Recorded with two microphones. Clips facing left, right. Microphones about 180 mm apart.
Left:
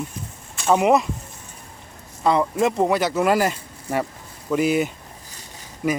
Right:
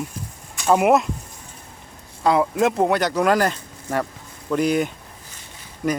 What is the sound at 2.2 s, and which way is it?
Speech, centre (ahead or behind).